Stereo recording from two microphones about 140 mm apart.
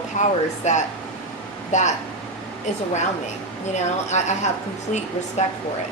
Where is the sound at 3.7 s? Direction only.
55° left (ahead or behind).